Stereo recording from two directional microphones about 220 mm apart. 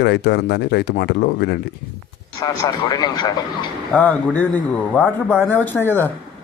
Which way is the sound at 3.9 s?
5° left (ahead or behind).